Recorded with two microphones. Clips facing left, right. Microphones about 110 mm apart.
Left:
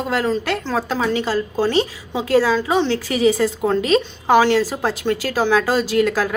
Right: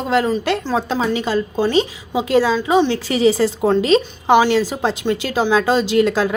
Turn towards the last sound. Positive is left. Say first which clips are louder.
# right 2 dB
turn(degrees=-25)  # may be behind; listen again after turning